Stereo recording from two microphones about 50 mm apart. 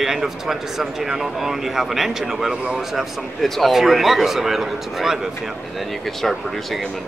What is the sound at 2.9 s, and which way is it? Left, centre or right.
Speech, centre.